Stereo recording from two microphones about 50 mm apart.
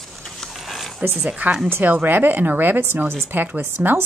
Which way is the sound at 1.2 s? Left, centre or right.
Right.